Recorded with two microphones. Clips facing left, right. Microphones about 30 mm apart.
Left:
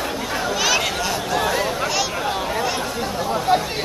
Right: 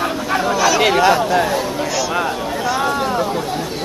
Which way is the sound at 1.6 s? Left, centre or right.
Centre.